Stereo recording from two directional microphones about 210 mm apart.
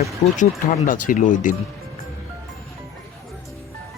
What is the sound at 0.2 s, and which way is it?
Speech, 35° left (ahead or behind).